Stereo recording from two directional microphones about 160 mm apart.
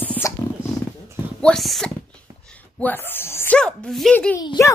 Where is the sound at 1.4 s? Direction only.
Centre (ahead or behind).